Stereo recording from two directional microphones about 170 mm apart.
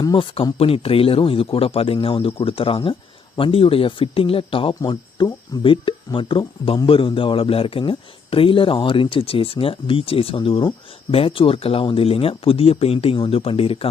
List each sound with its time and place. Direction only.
0.0 s speech: 30° left (ahead or behind)